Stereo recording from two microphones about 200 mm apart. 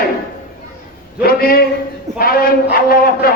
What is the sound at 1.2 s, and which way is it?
Speech, 50° left (ahead or behind).